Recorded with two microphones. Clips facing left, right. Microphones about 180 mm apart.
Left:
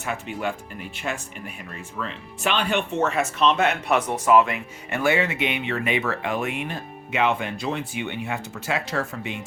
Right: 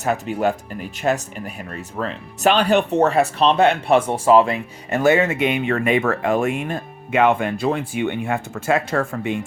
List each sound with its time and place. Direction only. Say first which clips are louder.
0.0 s speech: right 8 dB; 40° right (ahead or behind)